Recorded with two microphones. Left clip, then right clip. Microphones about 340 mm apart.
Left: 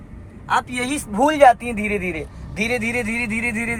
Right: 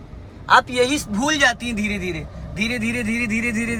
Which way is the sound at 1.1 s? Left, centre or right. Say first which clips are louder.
Left 5 dB; centre.